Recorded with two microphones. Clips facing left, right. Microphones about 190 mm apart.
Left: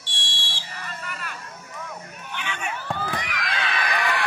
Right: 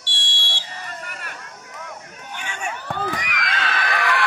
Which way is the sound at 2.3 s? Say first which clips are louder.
Right 1 dB; 45° right (ahead or behind).